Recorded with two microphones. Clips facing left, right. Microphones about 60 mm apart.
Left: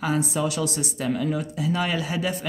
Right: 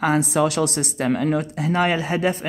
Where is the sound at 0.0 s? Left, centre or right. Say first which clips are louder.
Right 6 dB; right.